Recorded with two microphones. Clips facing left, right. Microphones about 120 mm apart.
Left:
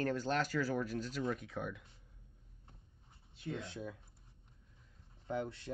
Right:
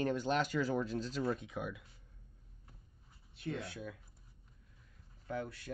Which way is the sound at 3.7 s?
25° left (ahead or behind).